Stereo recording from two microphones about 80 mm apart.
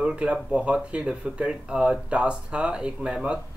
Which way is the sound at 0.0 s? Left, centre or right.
Centre.